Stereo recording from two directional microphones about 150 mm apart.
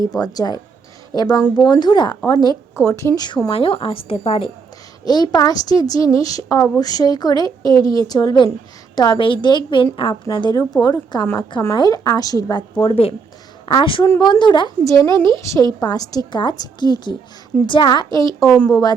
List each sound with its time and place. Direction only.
0.1 s a woman's voice: 25° left (ahead or behind)